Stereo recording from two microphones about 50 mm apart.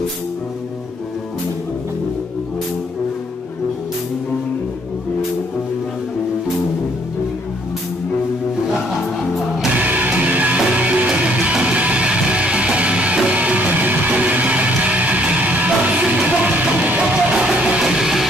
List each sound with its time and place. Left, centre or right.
9.8 s music: right; by 18.2 s centre